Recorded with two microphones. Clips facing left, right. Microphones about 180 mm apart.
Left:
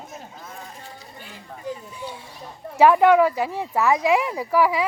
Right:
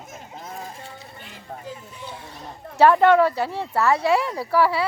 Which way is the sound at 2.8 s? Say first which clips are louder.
Even; 10° left (ahead or behind).